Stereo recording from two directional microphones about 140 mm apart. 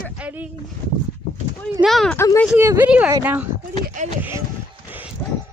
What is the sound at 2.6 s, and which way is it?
Speech, 20° right (ahead or behind).